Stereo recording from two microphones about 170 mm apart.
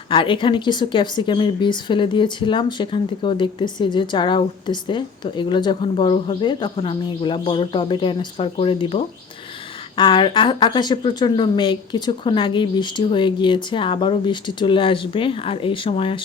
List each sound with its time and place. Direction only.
0.1 s speech: 30° left (ahead or behind)